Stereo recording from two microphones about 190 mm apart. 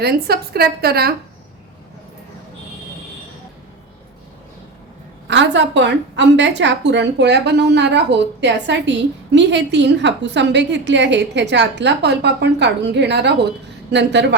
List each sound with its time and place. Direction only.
0.0 s a woman's voice: 55° right (ahead or behind)
5.3 s a woman's voice: 70° right (ahead or behind)